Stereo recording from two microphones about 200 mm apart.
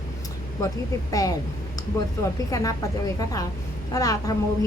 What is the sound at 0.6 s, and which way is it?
Speech, 15° left (ahead or behind).